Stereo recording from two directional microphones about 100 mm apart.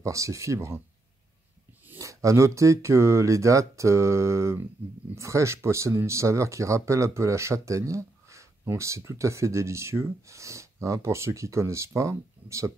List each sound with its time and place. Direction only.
0.0 s speech: 30° right (ahead or behind)
2.0 s speech: 35° right (ahead or behind)